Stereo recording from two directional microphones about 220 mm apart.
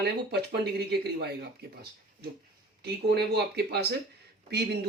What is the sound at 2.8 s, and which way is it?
Speech, 50° right (ahead or behind).